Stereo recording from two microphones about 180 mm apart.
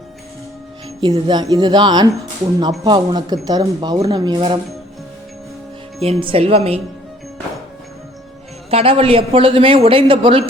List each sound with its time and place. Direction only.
1.0 s speech: 25° right (ahead or behind)
6.0 s a man's voice: 30° right (ahead or behind)
8.7 s a man's voice: 30° right (ahead or behind)